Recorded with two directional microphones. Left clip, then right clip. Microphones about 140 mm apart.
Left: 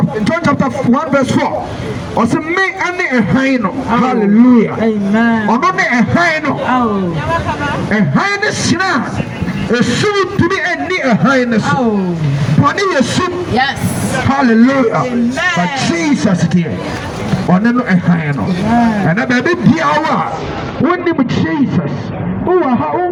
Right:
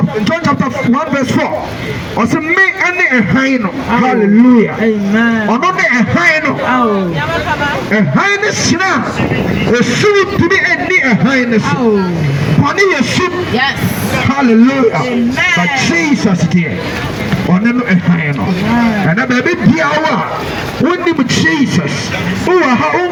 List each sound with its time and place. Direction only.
0.3 s a man's voice: 5° right (ahead or behind)
7.9 s a man's voice: centre (ahead or behind)
12.6 s a man's voice: 10° right (ahead or behind)
14.3 s a man's voice: 15° right (ahead or behind)
17.5 s a man's voice: 5° right (ahead or behind)
21.3 s a man's voice: 20° right (ahead or behind)